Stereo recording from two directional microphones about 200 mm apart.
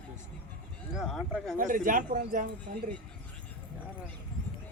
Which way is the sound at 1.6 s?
40° right (ahead or behind).